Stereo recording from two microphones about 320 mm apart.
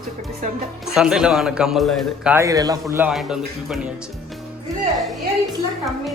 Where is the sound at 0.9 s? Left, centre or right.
Centre.